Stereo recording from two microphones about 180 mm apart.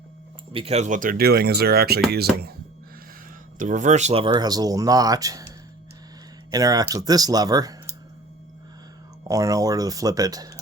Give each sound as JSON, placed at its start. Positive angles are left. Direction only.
{"t": 0.5, "sound": "speech", "side_deg": -35}
{"t": 3.6, "sound": "speech", "side_deg": -45}
{"t": 4.3, "sound": "speech", "side_deg": -20}
{"t": 9.2, "sound": "speech", "side_deg": -20}